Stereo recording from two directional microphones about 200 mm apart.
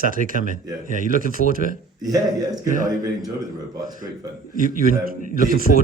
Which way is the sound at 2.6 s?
40° right (ahead or behind).